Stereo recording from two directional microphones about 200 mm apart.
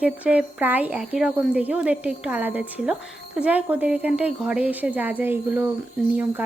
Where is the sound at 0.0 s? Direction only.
5° right (ahead or behind).